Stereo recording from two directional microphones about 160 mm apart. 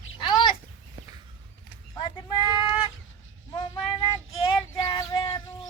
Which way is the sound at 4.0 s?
30° left (ahead or behind).